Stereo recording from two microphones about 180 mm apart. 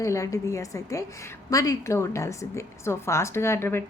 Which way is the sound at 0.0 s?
15° left (ahead or behind).